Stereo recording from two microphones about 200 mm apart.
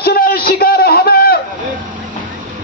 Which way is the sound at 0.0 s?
50° left (ahead or behind).